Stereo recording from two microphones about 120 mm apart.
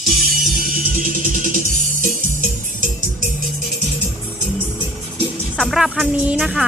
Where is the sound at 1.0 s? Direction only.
90° right.